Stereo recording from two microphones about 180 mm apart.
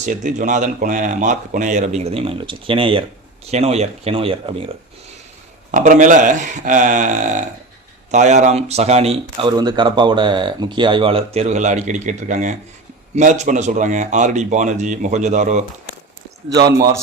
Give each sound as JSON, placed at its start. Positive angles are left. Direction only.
{"t": 0.0, "sound": "speech", "side_deg": -45}
{"t": 5.7, "sound": "speech", "side_deg": -45}
{"t": 9.6, "sound": "speech", "side_deg": -25}